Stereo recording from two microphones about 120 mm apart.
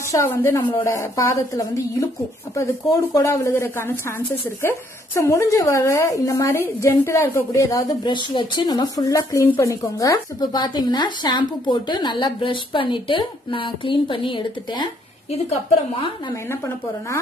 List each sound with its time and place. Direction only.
0.1 s a woman's voice: 20° left (ahead or behind)
8.0 s speech: 40° left (ahead or behind)